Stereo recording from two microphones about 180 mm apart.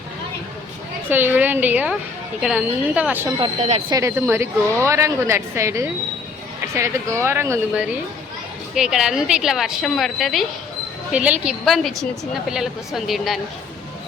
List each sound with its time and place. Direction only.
1.1 s a woman's voice: 10° right (ahead or behind)
3.3 s speech: 30° right (ahead or behind)
3.8 s a woman's voice: 20° right (ahead or behind)
8.7 s a woman's voice: 5° right (ahead or behind)